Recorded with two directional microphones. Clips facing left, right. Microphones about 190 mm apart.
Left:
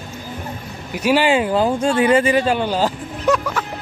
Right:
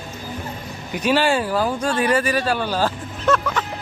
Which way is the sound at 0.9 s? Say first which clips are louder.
Left 3 dB; 10° left (ahead or behind).